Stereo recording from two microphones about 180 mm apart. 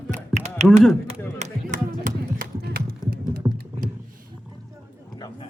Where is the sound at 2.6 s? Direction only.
55° right (ahead or behind).